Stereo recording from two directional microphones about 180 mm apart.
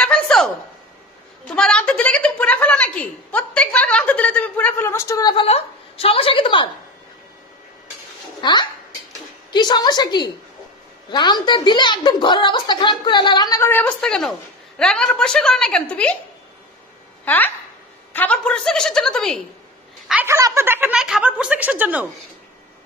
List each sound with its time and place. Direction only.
0.0 s a sound: 5° left (ahead or behind)
1.5 s a woman's voice: 5° left (ahead or behind)
5.4 s a woman's voice: 30° left (ahead or behind)
8.4 s a child's voice: 25° left (ahead or behind); by 16.2 s 5° left (ahead or behind)
17.2 s a sound: 10° left (ahead or behind)
18.1 s a woman's voice: 10° left (ahead or behind)
20.1 s a woman's voice: 10° right (ahead or behind)